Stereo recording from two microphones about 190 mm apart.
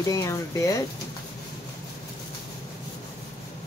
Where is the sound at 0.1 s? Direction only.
15° left (ahead or behind).